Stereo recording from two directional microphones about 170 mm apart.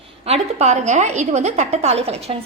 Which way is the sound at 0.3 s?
40° right (ahead or behind).